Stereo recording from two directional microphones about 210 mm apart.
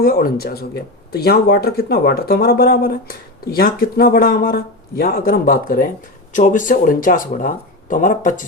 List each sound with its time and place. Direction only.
0.0 s speech: 45° left (ahead or behind)